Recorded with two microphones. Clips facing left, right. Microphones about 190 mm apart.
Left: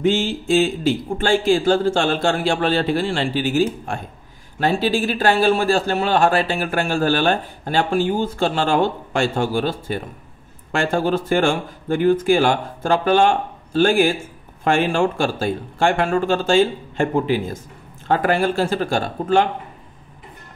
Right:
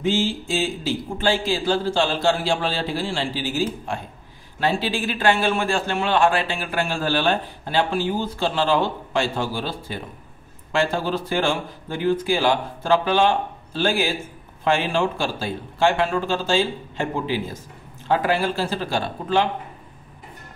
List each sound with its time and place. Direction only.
0.1 s a man's voice: 55° left (ahead or behind)
4.6 s speech: 45° left (ahead or behind)